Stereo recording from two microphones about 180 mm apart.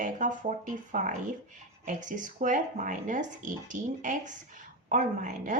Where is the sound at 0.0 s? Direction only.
45° right (ahead or behind).